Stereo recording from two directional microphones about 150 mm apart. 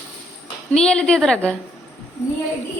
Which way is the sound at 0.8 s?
5° left (ahead or behind).